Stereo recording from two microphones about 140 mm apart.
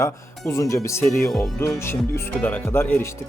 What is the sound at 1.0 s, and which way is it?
Speech, 5° left (ahead or behind).